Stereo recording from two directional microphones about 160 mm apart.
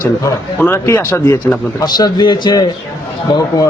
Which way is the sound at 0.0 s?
20° left (ahead or behind).